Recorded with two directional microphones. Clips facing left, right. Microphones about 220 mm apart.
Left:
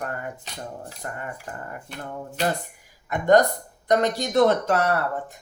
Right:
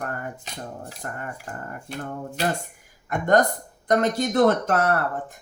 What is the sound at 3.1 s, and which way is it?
Speech, 50° right (ahead or behind).